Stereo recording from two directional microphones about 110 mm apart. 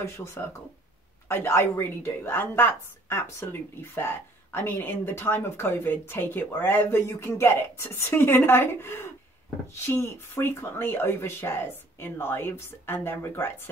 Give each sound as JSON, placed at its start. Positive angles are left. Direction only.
{"t": 0.0, "sound": "a woman's voice", "side_deg": 25}